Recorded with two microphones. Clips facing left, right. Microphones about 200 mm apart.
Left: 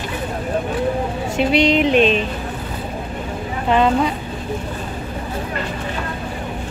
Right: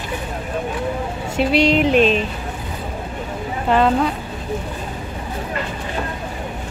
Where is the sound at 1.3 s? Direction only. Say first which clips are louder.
Even; 5° right (ahead or behind).